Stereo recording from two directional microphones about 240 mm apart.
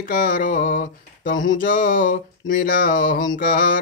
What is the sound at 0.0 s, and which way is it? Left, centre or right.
Speech, left.